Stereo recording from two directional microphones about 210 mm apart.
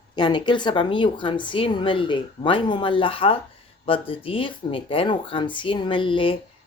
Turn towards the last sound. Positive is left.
turn(degrees=25)  # may be behind; listen again after turning